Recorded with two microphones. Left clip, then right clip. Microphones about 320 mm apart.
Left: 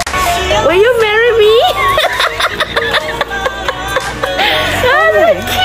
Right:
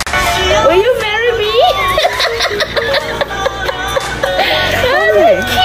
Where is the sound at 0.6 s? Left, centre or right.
Centre.